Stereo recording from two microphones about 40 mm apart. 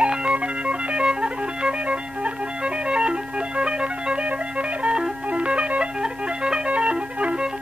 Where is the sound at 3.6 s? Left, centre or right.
Right.